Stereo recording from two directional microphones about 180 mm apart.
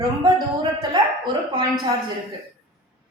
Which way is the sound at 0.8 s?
25° right (ahead or behind).